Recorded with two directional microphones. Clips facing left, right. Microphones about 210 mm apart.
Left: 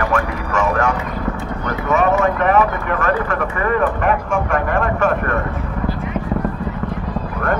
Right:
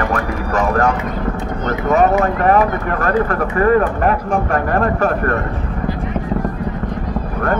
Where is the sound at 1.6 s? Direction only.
40° right (ahead or behind).